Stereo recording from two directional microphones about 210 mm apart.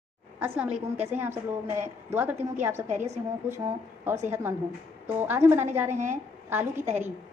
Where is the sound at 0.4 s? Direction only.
5° right (ahead or behind).